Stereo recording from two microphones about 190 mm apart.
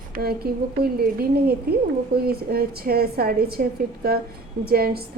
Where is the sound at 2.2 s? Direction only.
55° right (ahead or behind).